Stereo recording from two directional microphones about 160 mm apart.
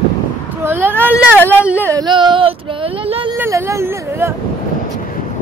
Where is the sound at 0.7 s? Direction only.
15° right (ahead or behind).